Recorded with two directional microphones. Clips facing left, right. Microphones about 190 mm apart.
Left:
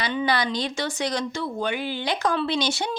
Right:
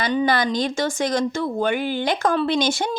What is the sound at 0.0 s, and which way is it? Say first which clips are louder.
A woman's voice: right 4 dB; 45° right (ahead or behind).